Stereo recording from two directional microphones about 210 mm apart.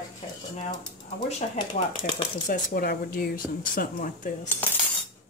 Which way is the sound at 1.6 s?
25° left (ahead or behind).